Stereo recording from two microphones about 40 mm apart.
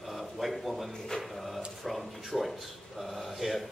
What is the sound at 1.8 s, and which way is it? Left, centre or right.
Speech, centre.